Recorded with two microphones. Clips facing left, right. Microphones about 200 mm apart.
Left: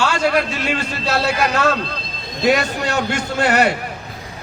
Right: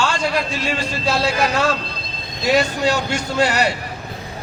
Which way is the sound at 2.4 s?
60° left (ahead or behind).